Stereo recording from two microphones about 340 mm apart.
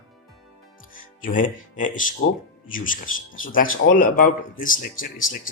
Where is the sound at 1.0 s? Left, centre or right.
Left.